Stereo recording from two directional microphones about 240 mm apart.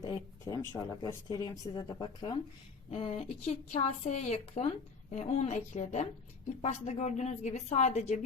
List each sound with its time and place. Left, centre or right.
0.0 s speech: centre